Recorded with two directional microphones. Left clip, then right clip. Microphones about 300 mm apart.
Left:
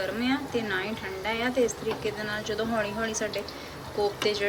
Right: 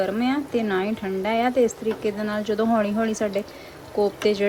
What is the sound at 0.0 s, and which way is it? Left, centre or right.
Speech, centre.